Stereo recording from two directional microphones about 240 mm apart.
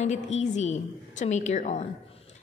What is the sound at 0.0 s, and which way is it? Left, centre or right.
A woman's voice, left.